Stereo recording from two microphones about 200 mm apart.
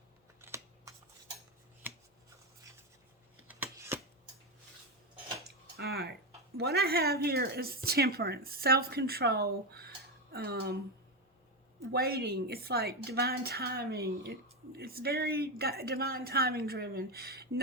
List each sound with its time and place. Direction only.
0.4 s scissors: 15° right (ahead or behind)
3.4 s scissors: 10° right (ahead or behind)
5.7 s a sound: 50° right (ahead or behind)
6.6 s speech: 55° right (ahead or behind)
11.9 s speech: 50° right (ahead or behind)